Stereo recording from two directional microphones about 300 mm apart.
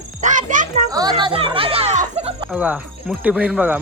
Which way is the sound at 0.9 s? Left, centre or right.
Centre.